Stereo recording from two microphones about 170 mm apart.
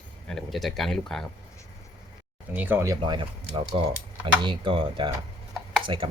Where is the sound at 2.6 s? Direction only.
10° right (ahead or behind).